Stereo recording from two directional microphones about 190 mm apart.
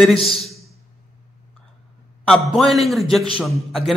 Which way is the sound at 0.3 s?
Centre (ahead or behind).